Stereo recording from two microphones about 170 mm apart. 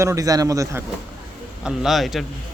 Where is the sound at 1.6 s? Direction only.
Centre (ahead or behind).